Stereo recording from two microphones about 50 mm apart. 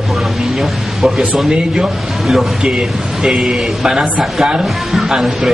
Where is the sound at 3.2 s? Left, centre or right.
Centre.